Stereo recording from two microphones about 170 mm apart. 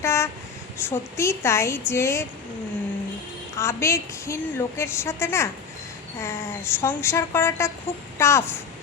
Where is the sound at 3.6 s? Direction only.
15° left (ahead or behind).